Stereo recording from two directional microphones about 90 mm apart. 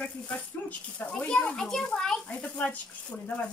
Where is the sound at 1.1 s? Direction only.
10° left (ahead or behind).